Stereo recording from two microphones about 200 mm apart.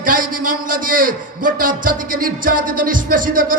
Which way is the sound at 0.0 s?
45° right (ahead or behind).